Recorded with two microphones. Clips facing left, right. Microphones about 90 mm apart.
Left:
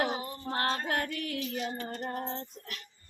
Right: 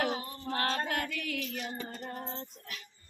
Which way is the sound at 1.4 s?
25° left (ahead or behind).